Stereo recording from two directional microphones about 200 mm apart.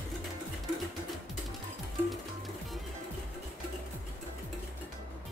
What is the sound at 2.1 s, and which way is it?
Music, centre (ahead or behind).